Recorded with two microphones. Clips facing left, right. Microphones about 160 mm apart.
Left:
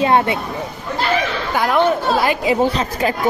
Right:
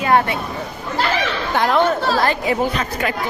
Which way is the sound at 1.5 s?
5° left (ahead or behind).